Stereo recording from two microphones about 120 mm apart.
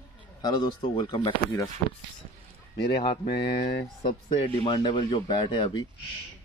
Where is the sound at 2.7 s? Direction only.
45° left (ahead or behind).